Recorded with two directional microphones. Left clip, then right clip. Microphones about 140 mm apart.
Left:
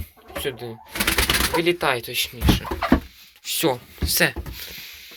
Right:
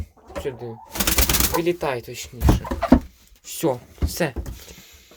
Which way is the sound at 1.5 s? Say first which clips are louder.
Left 2 dB; 15° right (ahead or behind).